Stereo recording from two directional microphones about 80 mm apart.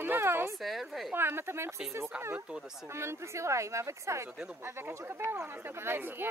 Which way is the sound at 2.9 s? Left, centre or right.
Right.